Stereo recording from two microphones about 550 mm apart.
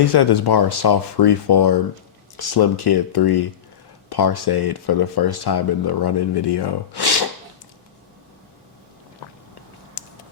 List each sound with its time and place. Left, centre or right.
0.0 s speech: left